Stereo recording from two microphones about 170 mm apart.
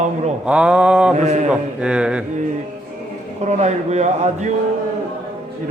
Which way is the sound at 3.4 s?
40° right (ahead or behind).